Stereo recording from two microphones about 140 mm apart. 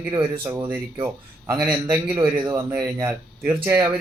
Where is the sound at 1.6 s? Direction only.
10° right (ahead or behind).